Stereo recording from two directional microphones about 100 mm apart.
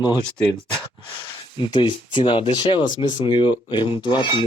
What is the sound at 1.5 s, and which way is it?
Speech, 55° left (ahead or behind).